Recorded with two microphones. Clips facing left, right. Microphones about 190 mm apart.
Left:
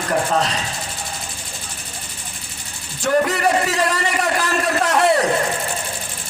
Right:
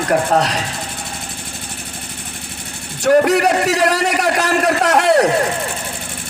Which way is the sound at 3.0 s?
70° right (ahead or behind).